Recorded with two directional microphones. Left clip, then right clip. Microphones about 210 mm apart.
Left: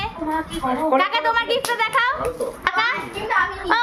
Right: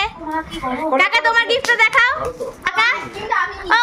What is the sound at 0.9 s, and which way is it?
A child's voice, 15° right (ahead or behind).